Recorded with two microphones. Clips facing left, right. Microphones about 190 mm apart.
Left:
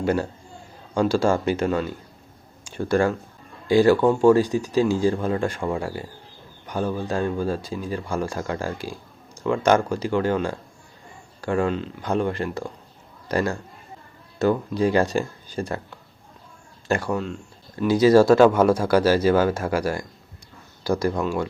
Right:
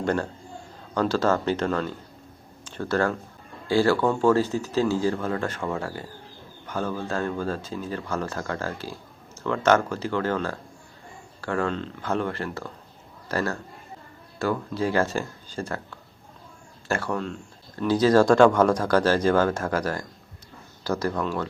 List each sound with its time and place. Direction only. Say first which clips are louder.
0.0 s a man's voice: left 3 dB; 10° left (ahead or behind)
16.9 s speech: left 3 dB; 10° left (ahead or behind)